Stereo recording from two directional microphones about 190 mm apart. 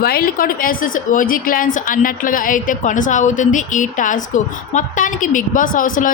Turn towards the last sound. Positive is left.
turn(degrees=45)  # may be behind; listen again after turning